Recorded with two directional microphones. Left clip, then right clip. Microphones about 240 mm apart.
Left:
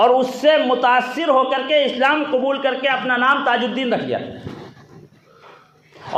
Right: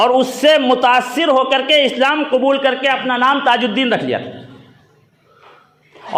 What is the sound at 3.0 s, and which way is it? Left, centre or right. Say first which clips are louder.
A man's voice: right 2 dB; right.